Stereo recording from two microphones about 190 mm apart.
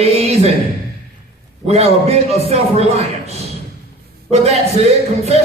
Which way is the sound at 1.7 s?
35° right (ahead or behind).